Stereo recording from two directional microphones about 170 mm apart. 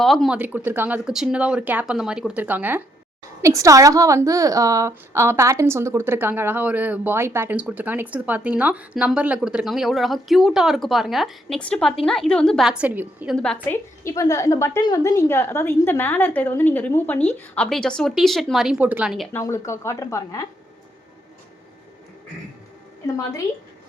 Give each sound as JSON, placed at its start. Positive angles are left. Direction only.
{"t": 0.0, "sound": "a woman's voice", "side_deg": 0}
{"t": 0.3, "sound": "a woman's voice", "side_deg": -10}
{"t": 13.3, "sound": "a woman's voice", "side_deg": 5}
{"t": 14.0, "sound": "a woman's voice", "side_deg": 20}
{"t": 19.3, "sound": "a woman's voice", "side_deg": 15}
{"t": 23.0, "sound": "a woman's voice", "side_deg": 20}